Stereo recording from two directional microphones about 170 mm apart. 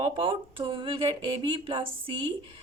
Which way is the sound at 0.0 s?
30° right (ahead or behind).